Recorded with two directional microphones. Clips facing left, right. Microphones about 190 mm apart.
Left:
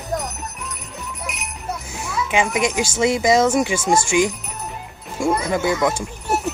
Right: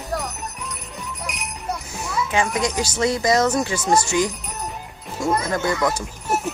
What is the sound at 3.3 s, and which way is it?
Speech, 10° left (ahead or behind).